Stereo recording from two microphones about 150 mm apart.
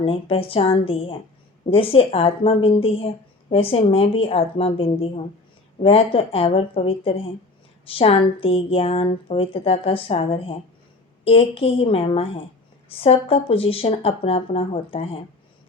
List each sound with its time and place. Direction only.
0.0 s a woman's voice: 40° left (ahead or behind)